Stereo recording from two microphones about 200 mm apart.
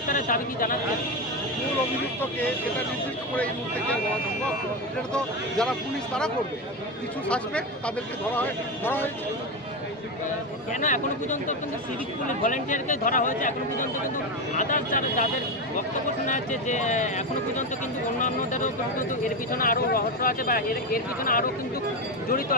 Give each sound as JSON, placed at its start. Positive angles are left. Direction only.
{"t": 0.1, "sound": "speech", "side_deg": 45}
{"t": 3.3, "sound": "speech", "side_deg": 5}
{"t": 7.3, "sound": "speech", "side_deg": 5}
{"t": 10.7, "sound": "speech", "side_deg": 40}